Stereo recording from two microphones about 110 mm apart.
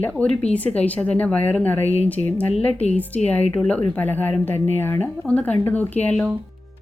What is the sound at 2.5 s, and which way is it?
Speech, 75° left (ahead or behind).